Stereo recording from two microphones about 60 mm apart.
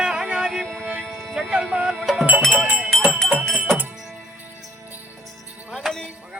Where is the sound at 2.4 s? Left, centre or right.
Right.